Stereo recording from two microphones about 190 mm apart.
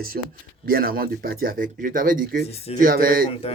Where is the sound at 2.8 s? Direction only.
50° right (ahead or behind).